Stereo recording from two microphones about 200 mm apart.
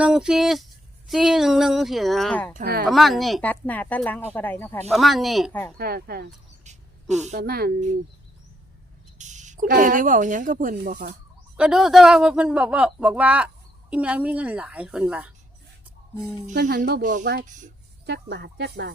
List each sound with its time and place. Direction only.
0.0 s speech: 5° right (ahead or behind)
2.5 s speech: 45° right (ahead or behind)
2.8 s speech: centre (ahead or behind)
5.7 s speech: 50° right (ahead or behind)
6.7 s a sound: 35° right (ahead or behind)
7.4 s speech: 50° right (ahead or behind)
9.1 s speech: 35° right (ahead or behind)
11.5 s a woman's voice: 5° right (ahead or behind)
16.6 s speech: 55° right (ahead or behind); by 17.2 s 40° right (ahead or behind)
18.0 s speech: 55° right (ahead or behind)